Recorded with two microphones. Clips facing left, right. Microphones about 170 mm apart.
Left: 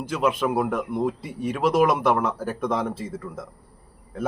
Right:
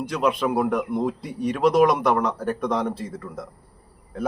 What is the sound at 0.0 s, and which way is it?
Speech, 5° left (ahead or behind).